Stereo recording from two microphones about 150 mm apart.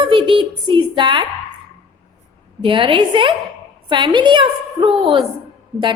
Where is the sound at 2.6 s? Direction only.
35° right (ahead or behind).